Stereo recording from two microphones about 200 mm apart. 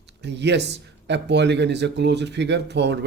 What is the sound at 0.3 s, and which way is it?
Speech, 60° right (ahead or behind).